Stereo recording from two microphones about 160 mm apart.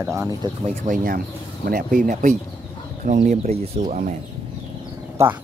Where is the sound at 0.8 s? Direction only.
55° right (ahead or behind).